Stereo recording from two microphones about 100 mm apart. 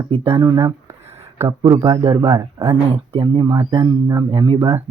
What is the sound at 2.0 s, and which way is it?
Speech, 75° right (ahead or behind).